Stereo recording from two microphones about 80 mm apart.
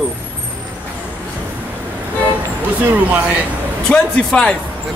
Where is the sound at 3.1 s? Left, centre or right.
Centre.